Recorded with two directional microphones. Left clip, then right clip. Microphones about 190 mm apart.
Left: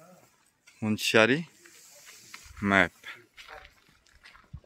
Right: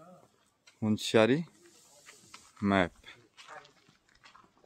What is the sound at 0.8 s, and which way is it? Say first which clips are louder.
Speech: left 3 dB; 5° right (ahead or behind).